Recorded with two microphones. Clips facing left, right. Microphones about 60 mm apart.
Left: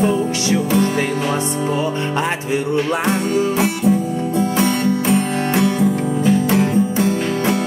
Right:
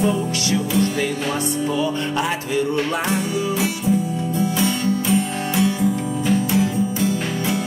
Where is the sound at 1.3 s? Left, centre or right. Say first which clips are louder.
Left 2 dB; left.